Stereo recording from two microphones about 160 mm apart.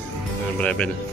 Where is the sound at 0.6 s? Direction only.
5° left (ahead or behind).